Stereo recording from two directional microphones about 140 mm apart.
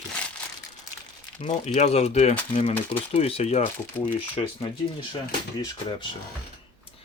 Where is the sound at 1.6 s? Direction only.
55° left (ahead or behind).